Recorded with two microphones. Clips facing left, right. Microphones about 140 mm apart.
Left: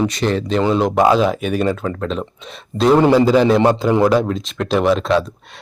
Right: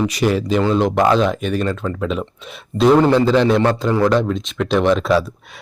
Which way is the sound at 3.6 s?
15° left (ahead or behind).